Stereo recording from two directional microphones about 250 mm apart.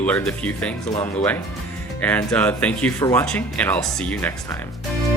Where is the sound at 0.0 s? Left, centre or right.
Centre.